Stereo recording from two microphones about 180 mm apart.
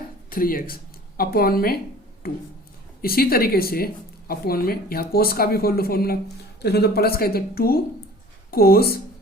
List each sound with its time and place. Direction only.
0.3 s speech: 50° left (ahead or behind)